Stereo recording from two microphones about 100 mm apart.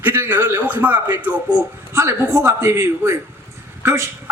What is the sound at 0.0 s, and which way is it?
A man's voice, 20° right (ahead or behind).